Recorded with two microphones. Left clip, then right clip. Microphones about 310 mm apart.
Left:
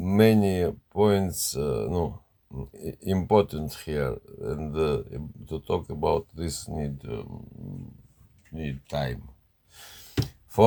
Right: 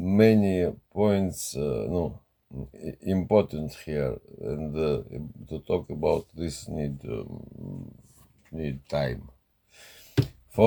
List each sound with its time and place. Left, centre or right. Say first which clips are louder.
0.0 s speech: even; left
8.5 s speech: right 2 dB; centre